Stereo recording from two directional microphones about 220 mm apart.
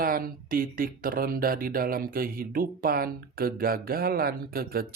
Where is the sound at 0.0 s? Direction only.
40° right (ahead or behind).